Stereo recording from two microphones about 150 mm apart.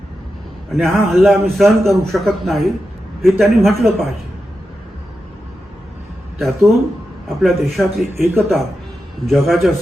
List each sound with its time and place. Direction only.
0.7 s a man's voice: centre (ahead or behind)
6.4 s a man's voice: centre (ahead or behind)
8.1 s a man's voice: 15° right (ahead or behind)
9.2 s a man's voice: centre (ahead or behind)